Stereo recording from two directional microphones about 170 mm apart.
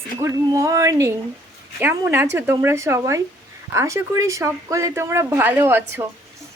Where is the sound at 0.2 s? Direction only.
20° right (ahead or behind).